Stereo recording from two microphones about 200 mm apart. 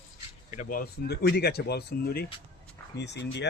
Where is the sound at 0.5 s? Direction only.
45° left (ahead or behind).